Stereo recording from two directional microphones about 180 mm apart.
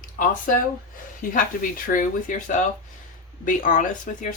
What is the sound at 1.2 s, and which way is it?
Speech, 50° left (ahead or behind).